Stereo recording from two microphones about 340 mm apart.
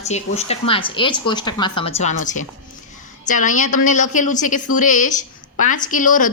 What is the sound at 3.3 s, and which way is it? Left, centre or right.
Speech, left.